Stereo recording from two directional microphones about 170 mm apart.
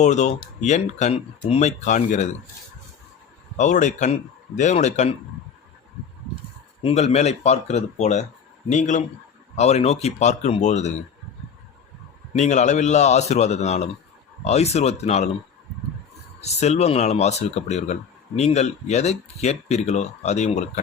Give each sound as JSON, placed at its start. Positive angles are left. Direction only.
{"t": 0.0, "sound": "speech", "side_deg": 45}
{"t": 3.6, "sound": "speech", "side_deg": 45}
{"t": 6.8, "sound": "speech", "side_deg": 40}
{"t": 12.3, "sound": "speech", "side_deg": 45}
{"t": 16.4, "sound": "speech", "side_deg": 40}